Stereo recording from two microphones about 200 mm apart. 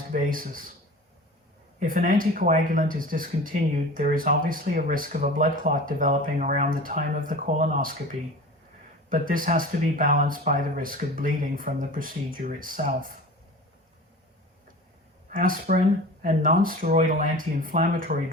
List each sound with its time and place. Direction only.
0.1 s speech: 45° right (ahead or behind)
1.8 s speech: 40° right (ahead or behind)
9.0 s speech: 45° right (ahead or behind)
15.3 s speech: 45° right (ahead or behind)